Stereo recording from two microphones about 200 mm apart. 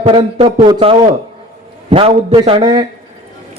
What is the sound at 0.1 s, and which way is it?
A man's voice, 25° right (ahead or behind).